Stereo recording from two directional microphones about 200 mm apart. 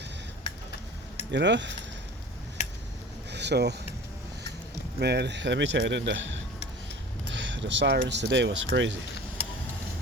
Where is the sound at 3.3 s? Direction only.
60° right (ahead or behind).